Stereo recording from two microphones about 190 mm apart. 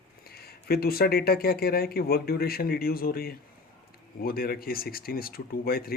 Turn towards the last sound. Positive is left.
turn(degrees=50)  # may be behind; listen again after turning